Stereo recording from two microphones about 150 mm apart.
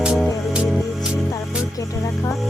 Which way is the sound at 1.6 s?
20° left (ahead or behind).